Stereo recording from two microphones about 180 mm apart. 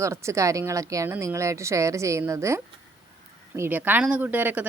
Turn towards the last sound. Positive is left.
turn(degrees=-10)  # may be behind; listen again after turning